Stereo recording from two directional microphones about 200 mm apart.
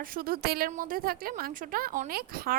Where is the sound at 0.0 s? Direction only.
45° right (ahead or behind).